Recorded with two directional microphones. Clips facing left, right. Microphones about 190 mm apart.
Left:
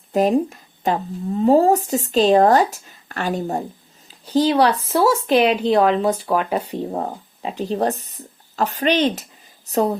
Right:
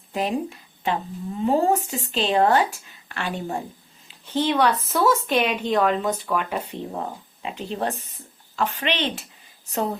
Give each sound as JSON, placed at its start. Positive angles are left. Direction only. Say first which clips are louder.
{"t": 0.1, "sound": "a woman's voice", "louder": "left 8 dB", "side_deg": 45}